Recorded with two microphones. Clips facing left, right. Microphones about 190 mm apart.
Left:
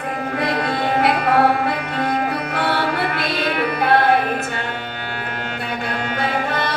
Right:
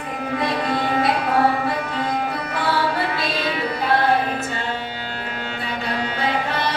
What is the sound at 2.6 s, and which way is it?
Music, 65° left (ahead or behind).